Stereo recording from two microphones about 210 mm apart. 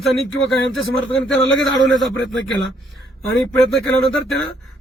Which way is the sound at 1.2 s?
Centre (ahead or behind).